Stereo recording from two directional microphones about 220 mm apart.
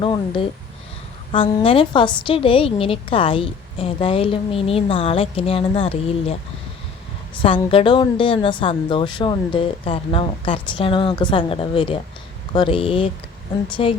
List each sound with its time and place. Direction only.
0.0 s a woman's voice: 25° left (ahead or behind)
7.4 s a woman's voice: 25° left (ahead or behind)